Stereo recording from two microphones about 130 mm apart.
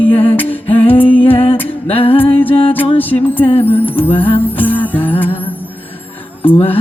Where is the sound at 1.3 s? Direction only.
45° left (ahead or behind).